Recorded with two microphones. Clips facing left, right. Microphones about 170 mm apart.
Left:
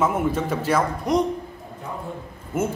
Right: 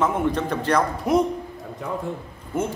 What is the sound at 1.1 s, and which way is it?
Speech, 5° right (ahead or behind).